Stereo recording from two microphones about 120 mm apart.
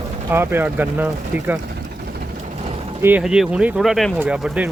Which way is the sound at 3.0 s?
15° right (ahead or behind).